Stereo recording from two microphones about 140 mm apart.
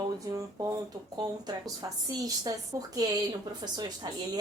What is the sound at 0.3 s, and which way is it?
A woman's voice, 25° right (ahead or behind).